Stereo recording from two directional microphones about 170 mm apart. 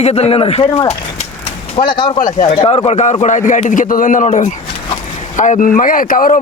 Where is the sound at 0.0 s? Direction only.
40° left (ahead or behind).